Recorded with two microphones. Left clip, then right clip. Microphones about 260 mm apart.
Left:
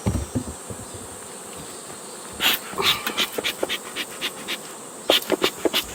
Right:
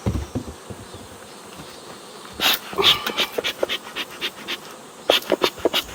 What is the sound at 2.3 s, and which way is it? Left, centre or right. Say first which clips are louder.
Dog: right 2 dB; right.